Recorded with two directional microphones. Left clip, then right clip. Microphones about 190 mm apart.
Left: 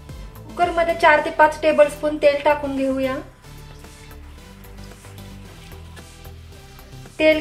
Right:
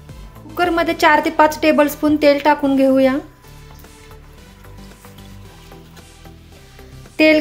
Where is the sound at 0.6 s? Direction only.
55° right (ahead or behind).